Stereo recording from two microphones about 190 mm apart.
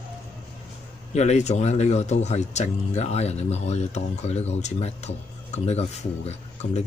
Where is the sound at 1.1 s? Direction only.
35° left (ahead or behind).